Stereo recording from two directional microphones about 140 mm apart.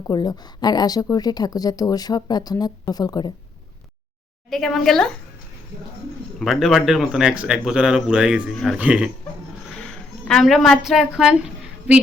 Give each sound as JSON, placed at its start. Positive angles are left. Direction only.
{"t": 0.1, "sound": "speech", "side_deg": 30}
{"t": 4.4, "sound": "speech", "side_deg": 0}
{"t": 6.4, "sound": "speech", "side_deg": 0}
{"t": 8.8, "sound": "speech", "side_deg": -10}
{"t": 10.2, "sound": "a woman's voice", "side_deg": 0}